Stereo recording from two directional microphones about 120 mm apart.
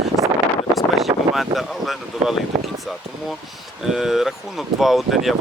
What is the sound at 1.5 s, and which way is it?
Speech, centre (ahead or behind).